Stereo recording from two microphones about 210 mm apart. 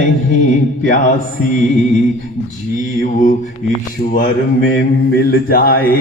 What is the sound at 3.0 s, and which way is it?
Mantra, 35° left (ahead or behind).